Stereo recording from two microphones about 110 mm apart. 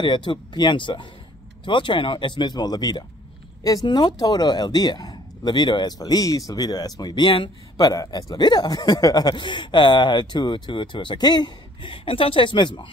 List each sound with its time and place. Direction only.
0.0 s speech: 45° left (ahead or behind)